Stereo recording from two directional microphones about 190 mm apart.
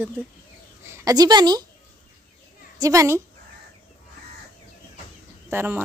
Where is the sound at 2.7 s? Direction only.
15° right (ahead or behind).